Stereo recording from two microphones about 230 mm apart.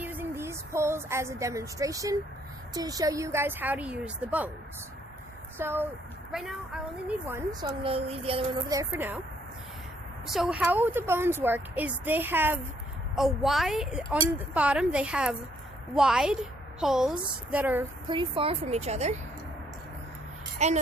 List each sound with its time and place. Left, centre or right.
0.0 s a woman's voice: centre
5.5 s a woman's voice: centre
7.9 s a woman's voice: right
8.7 s a woman's voice: centre
10.2 s a woman's voice: centre
18.1 s a woman's voice: right
20.6 s a woman's voice: right